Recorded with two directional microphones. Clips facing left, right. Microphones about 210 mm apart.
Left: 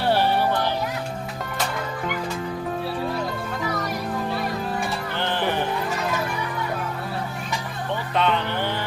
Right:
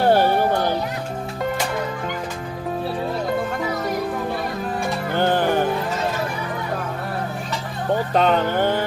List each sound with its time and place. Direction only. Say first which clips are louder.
0.0 s children playing: right 4 dB; 45° right (ahead or behind)
5.1 s music: right 7 dB; 45° right (ahead or behind)
7.9 s music: right 5 dB; 45° right (ahead or behind)